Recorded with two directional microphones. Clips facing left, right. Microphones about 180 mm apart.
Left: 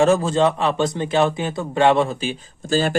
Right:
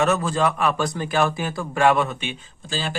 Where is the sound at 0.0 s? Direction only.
30° left (ahead or behind).